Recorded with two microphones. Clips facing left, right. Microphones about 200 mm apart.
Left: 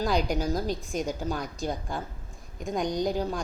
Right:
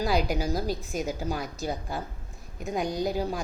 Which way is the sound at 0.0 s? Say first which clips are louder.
Even; 5° right (ahead or behind).